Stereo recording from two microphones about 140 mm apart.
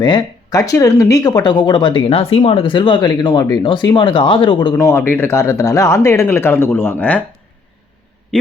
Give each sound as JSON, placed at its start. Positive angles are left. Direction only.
{"t": 0.0, "sound": "speech", "side_deg": 35}
{"t": 4.8, "sound": "speech", "side_deg": 20}
{"t": 8.3, "sound": "a man's voice", "side_deg": 5}